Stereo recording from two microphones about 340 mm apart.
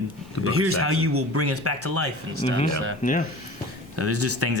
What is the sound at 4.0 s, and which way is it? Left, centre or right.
Speech, right.